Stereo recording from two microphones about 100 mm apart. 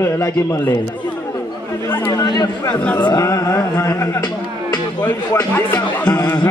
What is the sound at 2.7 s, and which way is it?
Speech, 15° left (ahead or behind).